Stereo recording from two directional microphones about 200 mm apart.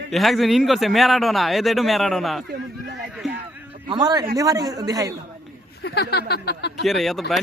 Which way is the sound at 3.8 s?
20° right (ahead or behind).